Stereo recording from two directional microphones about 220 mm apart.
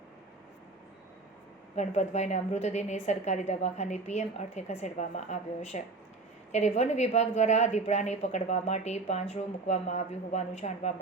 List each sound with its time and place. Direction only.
1.7 s a woman's voice: 30° left (ahead or behind)